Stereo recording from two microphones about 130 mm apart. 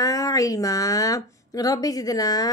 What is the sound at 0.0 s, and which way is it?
Speech, 25° left (ahead or behind).